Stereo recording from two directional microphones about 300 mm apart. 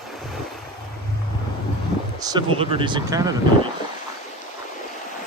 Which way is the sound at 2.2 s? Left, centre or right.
Centre.